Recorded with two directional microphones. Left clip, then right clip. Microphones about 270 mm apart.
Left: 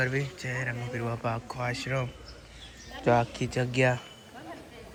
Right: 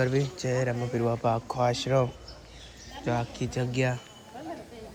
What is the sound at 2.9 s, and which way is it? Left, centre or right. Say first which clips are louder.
Speech: left 6 dB; centre.